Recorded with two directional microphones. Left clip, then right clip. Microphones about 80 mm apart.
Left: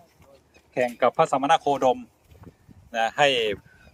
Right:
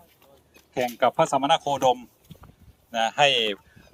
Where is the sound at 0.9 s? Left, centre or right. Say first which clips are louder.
Even; left.